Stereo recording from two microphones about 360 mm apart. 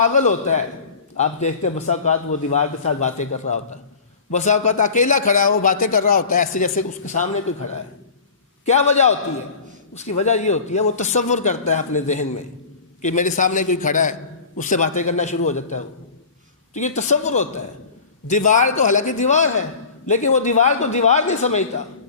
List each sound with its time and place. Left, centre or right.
0.0 s a man's voice: centre
8.6 s a man's voice: centre